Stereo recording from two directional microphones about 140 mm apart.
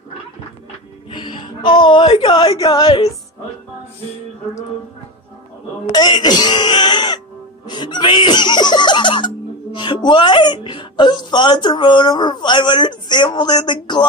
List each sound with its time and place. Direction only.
1.1 s a woman's voice: 35° left (ahead or behind)
5.9 s speech: 30° left (ahead or behind)
7.6 s music: 35° left (ahead or behind)